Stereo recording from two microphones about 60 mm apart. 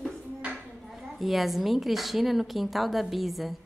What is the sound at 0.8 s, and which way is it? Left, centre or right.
A woman's voice, centre.